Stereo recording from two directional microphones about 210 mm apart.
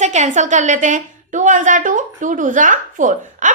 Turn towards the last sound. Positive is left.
turn(degrees=-35)  # may be behind; listen again after turning